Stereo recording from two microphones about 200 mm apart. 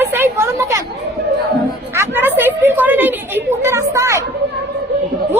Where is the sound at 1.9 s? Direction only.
10° right (ahead or behind).